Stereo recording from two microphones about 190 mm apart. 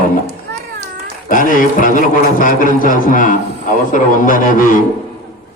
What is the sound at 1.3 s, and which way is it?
A man's voice, 45° left (ahead or behind).